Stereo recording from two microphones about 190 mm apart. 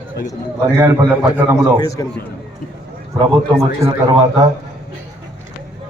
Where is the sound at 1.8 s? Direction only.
20° left (ahead or behind).